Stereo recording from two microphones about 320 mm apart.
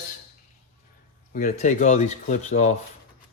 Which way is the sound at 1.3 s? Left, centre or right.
Left.